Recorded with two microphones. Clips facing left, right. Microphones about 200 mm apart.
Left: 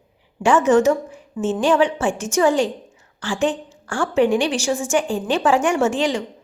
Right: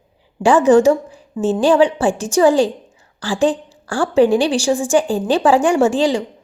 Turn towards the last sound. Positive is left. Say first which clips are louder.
# right 5 dB
turn(degrees=-30)  # may be behind; listen again after turning